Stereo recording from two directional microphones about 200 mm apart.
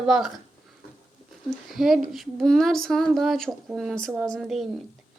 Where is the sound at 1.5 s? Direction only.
Centre (ahead or behind).